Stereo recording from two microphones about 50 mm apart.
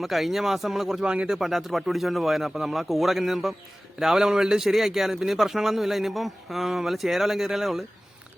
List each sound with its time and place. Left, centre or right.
0.0 s speech: centre
1.0 s speech: centre
1.4 s speech: centre